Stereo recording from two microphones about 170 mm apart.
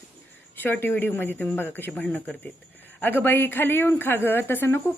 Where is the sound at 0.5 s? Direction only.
10° left (ahead or behind).